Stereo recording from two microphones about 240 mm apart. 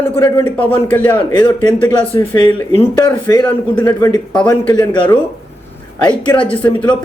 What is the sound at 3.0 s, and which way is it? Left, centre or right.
Speech, centre.